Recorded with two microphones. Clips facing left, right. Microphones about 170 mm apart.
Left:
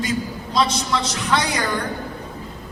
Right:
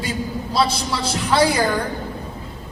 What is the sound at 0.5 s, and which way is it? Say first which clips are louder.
Speech: left 1 dB; 30° right (ahead or behind).